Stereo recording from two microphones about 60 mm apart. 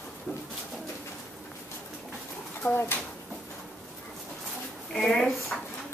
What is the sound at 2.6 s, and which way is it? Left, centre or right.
Speech, left.